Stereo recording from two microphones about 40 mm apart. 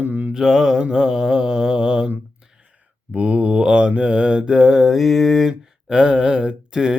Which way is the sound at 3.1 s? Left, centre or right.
Right.